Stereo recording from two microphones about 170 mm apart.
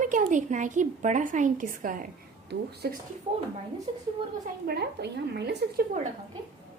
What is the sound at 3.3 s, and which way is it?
Speech, 45° right (ahead or behind).